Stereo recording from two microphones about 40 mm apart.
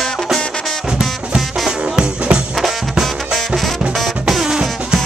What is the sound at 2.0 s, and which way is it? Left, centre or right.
Music, right.